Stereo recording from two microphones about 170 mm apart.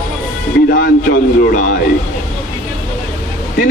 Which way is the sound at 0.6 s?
80° left.